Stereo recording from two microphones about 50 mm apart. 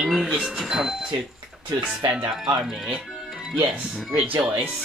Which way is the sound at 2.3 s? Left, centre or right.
Centre.